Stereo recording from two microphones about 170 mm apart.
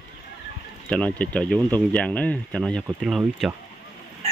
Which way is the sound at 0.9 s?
5° left (ahead or behind).